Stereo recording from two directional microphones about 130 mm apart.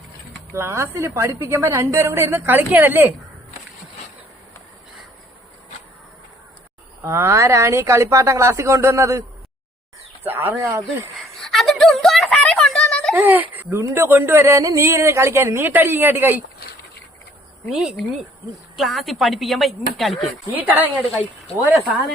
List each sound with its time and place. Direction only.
0.5 s speech: 20° right (ahead or behind)
7.0 s speech: 20° right (ahead or behind)
10.2 s speech: 20° right (ahead or behind)
11.3 s a sound: centre (ahead or behind)
13.1 s speech: 15° right (ahead or behind)
18.8 s a woman's voice: centre (ahead or behind)
20.5 s speech: 15° right (ahead or behind)